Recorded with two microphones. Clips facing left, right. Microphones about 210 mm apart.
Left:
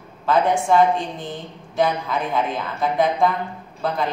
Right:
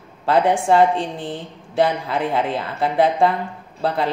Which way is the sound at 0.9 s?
30° right (ahead or behind).